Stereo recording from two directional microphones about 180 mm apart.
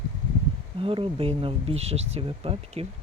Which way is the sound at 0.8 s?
30° right (ahead or behind).